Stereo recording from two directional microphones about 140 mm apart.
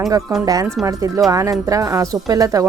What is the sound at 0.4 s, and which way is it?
A woman's voice, 25° right (ahead or behind).